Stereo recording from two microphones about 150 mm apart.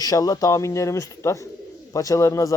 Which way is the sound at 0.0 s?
25° left (ahead or behind).